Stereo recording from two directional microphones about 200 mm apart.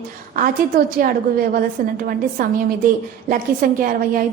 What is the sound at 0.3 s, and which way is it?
A woman's voice, 45° right (ahead or behind).